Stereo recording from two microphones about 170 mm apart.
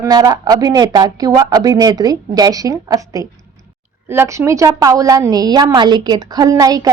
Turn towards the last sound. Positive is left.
turn(degrees=-20)  # may be behind; listen again after turning